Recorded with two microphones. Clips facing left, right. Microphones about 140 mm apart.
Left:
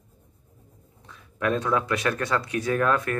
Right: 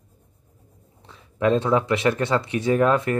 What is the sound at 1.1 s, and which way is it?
Speech, 25° right (ahead or behind).